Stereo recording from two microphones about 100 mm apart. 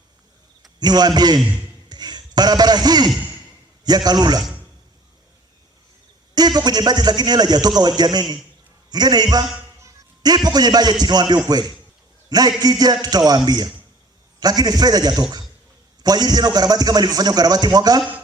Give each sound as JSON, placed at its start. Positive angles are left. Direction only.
{"t": 0.8, "sound": "a man's voice", "side_deg": -45}
{"t": 1.9, "sound": "a sound", "side_deg": -45}
{"t": 3.8, "sound": "a man's voice", "side_deg": -45}
{"t": 6.3, "sound": "a man's voice", "side_deg": -45}